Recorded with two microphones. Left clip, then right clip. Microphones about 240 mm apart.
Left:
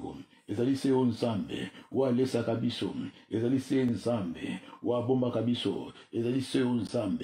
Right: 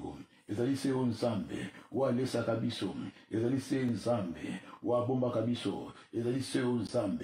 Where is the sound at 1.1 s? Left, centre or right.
Left.